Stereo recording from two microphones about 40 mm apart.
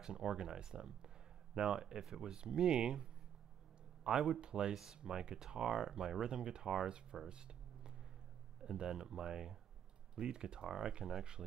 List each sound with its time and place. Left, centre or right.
0.0 s speech: centre
7.2 s a sound: right
8.8 s speech: centre